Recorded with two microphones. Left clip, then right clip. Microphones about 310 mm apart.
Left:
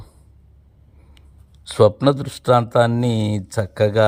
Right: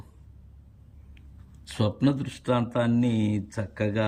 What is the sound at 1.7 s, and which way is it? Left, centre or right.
Speech, centre.